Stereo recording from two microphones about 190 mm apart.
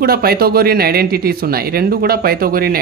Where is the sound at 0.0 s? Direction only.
55° right (ahead or behind).